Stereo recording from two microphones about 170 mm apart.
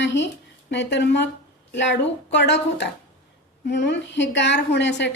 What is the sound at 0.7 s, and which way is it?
A woman's voice, 90° left.